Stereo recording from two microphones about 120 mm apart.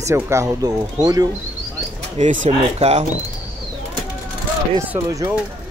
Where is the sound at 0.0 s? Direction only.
25° right (ahead or behind).